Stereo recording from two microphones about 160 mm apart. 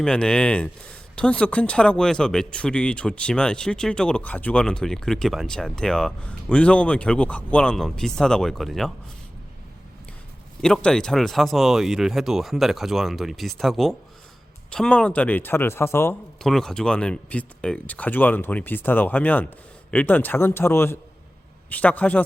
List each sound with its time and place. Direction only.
0.0 s speech: 5° left (ahead or behind)
10.6 s speech: 5° left (ahead or behind)
16.4 s speech: 5° left (ahead or behind)